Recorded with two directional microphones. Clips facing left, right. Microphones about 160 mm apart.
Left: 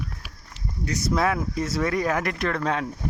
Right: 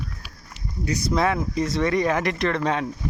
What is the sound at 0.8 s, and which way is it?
Speech, centre (ahead or behind).